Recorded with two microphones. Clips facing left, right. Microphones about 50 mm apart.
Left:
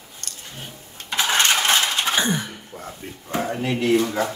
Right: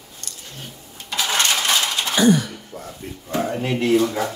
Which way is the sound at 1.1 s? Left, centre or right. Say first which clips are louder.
Left 1 dB; left.